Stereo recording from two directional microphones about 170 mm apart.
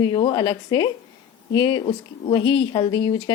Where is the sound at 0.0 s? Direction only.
25° left (ahead or behind).